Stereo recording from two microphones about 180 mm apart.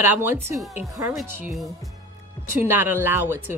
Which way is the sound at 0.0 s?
10° right (ahead or behind).